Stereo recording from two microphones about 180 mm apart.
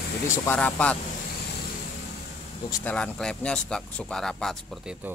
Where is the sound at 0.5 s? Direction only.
5° left (ahead or behind).